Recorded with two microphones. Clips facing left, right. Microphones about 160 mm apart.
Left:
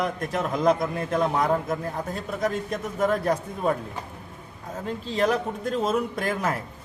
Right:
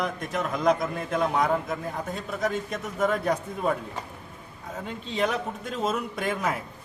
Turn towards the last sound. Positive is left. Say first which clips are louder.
# left 1 dB
turn(degrees=0)  # may be behind; listen again after turning